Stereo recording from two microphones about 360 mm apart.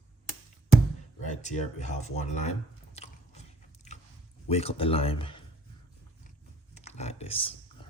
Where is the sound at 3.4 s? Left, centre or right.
Centre.